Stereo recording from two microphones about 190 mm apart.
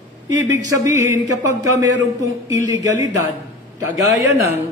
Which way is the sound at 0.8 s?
15° right (ahead or behind).